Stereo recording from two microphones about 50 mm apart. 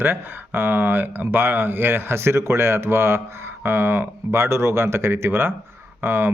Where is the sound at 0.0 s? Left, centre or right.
Right.